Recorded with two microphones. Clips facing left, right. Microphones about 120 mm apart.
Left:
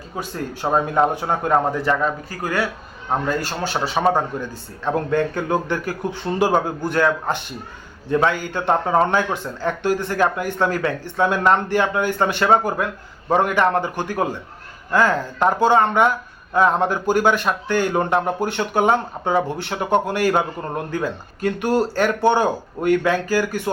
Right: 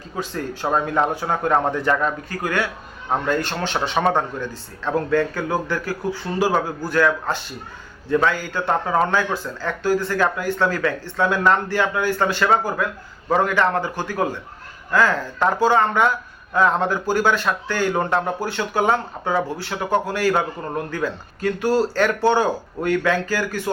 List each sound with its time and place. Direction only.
0.2 s a man's voice: 15° left (ahead or behind)
2.4 s a man's voice: 35° left (ahead or behind)
3.2 s a man's voice: 10° left (ahead or behind)
4.9 s a man's voice: 20° left (ahead or behind)